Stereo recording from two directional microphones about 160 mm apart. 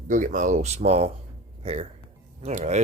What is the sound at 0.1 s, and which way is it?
Speech, 55° right (ahead or behind).